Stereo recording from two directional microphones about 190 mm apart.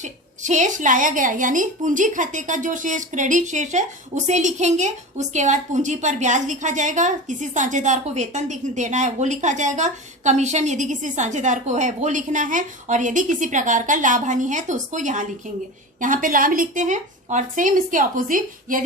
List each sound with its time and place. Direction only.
0.0 s a woman's voice: 40° right (ahead or behind)